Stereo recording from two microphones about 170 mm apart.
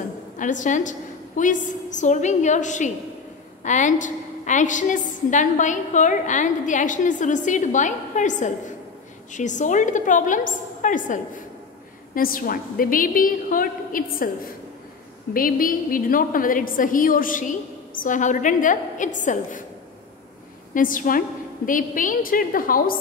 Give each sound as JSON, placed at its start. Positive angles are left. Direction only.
{"t": 0.4, "sound": "a woman's voice", "side_deg": 50}
{"t": 20.7, "sound": "a woman's voice", "side_deg": 50}